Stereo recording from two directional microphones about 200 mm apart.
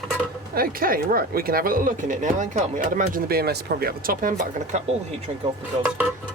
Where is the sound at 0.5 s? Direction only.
45° right (ahead or behind).